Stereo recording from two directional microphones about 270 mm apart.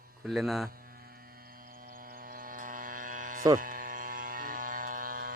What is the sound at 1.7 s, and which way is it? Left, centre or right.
Hum, right.